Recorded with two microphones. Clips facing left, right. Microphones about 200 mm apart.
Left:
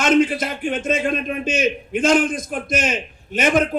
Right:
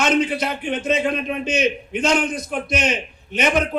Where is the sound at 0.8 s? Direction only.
50° left (ahead or behind).